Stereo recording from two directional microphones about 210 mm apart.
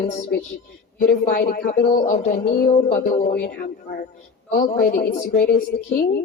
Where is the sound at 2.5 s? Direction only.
45° left (ahead or behind).